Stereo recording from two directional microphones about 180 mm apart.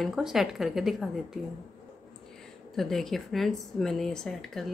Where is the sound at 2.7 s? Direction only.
Centre (ahead or behind).